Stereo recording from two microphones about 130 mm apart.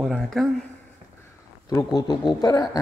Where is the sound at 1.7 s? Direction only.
30° left (ahead or behind).